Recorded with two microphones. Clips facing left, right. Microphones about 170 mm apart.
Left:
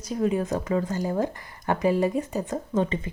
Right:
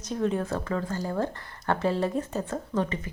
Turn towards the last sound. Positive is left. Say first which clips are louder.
# left 3 dB
turn(degrees=20)  # may be behind; listen again after turning